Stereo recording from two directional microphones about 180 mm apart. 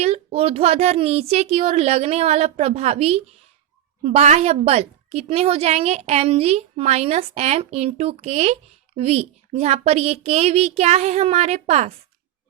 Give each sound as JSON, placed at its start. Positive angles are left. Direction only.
{"t": 0.0, "sound": "a woman's voice", "side_deg": -35}